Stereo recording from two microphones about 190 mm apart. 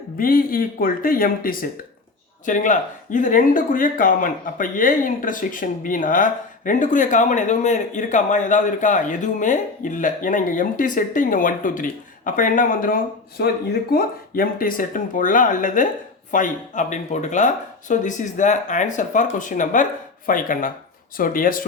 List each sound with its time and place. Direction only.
0.2 s speech: 50° left (ahead or behind)